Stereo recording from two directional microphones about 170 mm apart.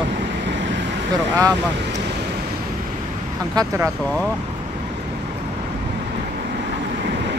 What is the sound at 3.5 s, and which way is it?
Speech, 15° right (ahead or behind).